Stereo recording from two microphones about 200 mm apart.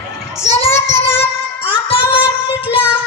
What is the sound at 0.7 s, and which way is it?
Child singing, 10° left (ahead or behind).